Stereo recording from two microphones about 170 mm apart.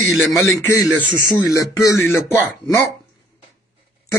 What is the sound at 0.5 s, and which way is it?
Speech, 20° left (ahead or behind).